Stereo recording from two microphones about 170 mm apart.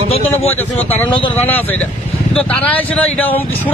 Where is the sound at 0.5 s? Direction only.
10° left (ahead or behind).